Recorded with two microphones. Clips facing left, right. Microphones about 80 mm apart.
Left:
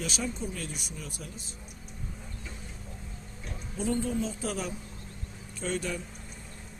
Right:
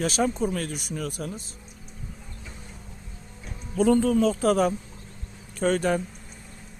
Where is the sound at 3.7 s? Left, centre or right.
Right.